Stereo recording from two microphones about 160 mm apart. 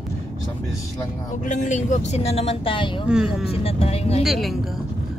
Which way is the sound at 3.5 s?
40° left (ahead or behind).